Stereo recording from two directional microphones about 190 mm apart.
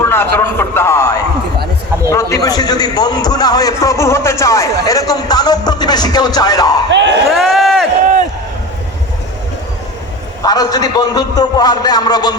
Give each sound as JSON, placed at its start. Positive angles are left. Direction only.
{"t": 0.0, "sound": "a man's voice", "side_deg": 10}
{"t": 6.9, "sound": "speech", "side_deg": -70}
{"t": 7.3, "sound": "a sound", "side_deg": 0}
{"t": 10.4, "sound": "a man's voice", "side_deg": 20}